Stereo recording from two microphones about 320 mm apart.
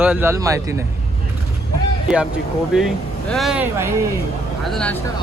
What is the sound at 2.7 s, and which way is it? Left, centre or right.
Speech, centre.